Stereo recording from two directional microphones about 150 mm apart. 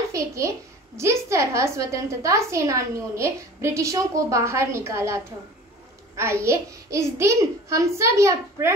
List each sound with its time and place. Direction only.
0.1 s a child's voice: 20° right (ahead or behind)